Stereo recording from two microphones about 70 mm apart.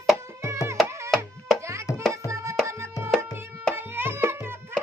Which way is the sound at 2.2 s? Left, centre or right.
Right.